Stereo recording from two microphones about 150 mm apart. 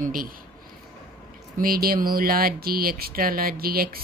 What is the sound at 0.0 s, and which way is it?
Speech, 70° right (ahead or behind).